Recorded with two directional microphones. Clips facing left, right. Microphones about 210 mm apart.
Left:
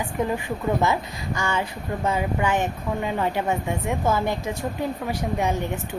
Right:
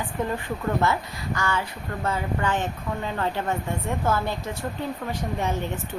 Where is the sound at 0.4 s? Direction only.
15° left (ahead or behind).